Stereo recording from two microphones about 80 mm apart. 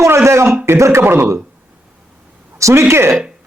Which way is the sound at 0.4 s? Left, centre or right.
Right.